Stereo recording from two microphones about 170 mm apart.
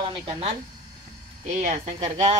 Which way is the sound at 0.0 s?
35° right (ahead or behind).